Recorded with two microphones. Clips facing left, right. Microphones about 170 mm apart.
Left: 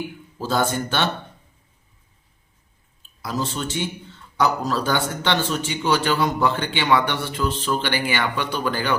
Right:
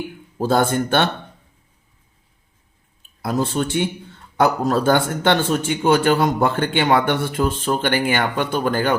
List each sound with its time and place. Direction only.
0.3 s speech: 55° right (ahead or behind)
3.0 s a man's voice: 55° right (ahead or behind)